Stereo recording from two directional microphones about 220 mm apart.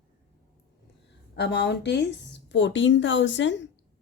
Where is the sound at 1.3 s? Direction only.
50° left (ahead or behind).